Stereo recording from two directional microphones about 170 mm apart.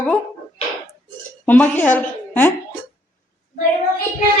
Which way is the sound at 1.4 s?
10° left (ahead or behind).